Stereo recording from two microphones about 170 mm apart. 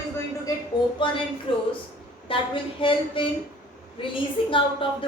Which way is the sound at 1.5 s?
30° left (ahead or behind).